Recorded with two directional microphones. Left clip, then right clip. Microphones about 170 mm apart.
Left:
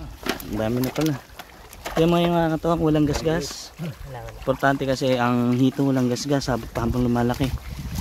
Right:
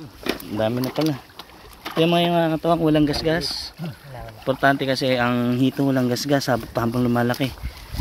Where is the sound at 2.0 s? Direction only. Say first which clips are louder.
Right 1 dB; 20° left (ahead or behind); by 7.5 s centre (ahead or behind).